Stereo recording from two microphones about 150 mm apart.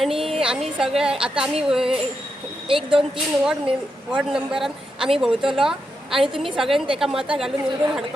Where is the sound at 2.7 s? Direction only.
35° right (ahead or behind).